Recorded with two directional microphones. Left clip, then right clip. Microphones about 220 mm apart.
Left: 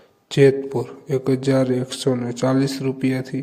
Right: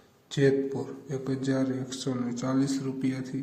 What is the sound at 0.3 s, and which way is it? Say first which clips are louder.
Speech: left 9 dB; 35° left (ahead or behind).